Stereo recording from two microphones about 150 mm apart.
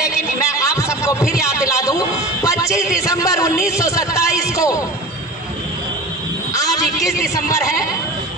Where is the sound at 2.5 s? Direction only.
20° left (ahead or behind).